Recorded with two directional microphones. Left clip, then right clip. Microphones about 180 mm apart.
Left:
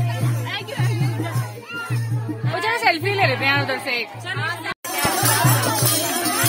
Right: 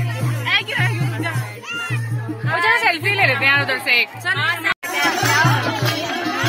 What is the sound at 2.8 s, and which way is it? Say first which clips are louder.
Music: right 2 dB; 55° left (ahead or behind).